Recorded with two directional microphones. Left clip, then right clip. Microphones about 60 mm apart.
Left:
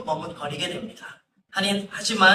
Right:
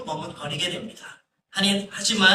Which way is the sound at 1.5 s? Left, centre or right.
Left.